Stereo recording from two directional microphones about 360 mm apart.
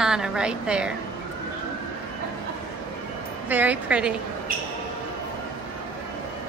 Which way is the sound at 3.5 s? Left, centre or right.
Centre.